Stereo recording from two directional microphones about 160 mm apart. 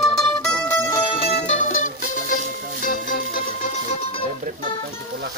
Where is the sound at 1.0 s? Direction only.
35° left (ahead or behind); by 3.2 s 55° left (ahead or behind).